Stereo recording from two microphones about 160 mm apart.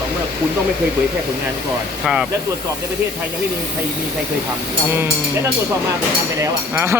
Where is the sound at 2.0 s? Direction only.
5° right (ahead or behind).